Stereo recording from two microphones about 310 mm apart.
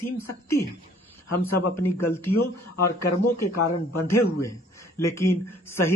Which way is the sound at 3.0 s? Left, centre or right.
Left.